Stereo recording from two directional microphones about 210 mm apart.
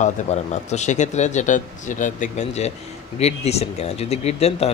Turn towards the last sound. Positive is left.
turn(degrees=30)  # may be behind; listen again after turning